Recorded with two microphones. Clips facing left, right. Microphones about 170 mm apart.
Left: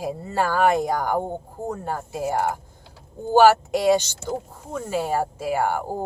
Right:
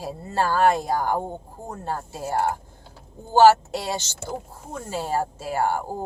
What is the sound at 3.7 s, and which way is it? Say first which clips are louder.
A woman's voice: left 10 dB; 15° left (ahead or behind).